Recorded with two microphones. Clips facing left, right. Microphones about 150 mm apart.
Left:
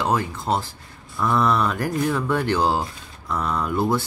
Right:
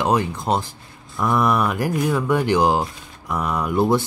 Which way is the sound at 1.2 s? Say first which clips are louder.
Right 1 dB; 15° right (ahead or behind).